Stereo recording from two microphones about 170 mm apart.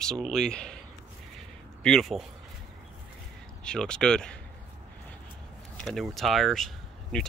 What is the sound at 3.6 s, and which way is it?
Speech, 5° left (ahead or behind).